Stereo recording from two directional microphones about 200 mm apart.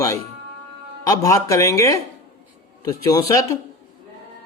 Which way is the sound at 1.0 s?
15° left (ahead or behind).